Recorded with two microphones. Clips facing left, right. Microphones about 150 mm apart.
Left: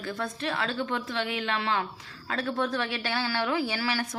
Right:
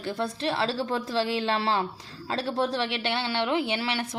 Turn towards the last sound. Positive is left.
turn(degrees=-25)  # may be behind; listen again after turning